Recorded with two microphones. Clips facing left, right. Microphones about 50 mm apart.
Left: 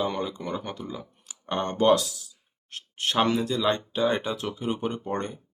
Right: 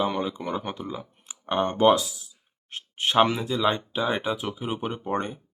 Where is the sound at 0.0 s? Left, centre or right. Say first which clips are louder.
Right 2 dB; centre.